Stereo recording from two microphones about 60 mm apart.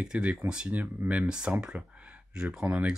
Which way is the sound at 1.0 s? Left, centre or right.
Right.